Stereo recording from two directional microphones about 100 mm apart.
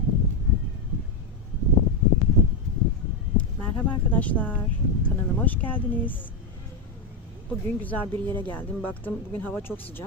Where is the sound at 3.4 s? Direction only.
15° left (ahead or behind).